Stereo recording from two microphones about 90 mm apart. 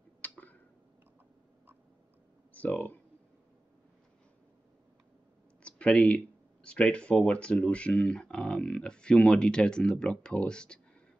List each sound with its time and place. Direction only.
0.2 s tick-tock: 20° left (ahead or behind)
2.5 s speech: 15° left (ahead or behind)
5.6 s speech: 10° left (ahead or behind)